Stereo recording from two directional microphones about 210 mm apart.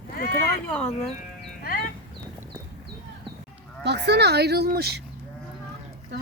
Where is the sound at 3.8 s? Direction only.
55° right (ahead or behind).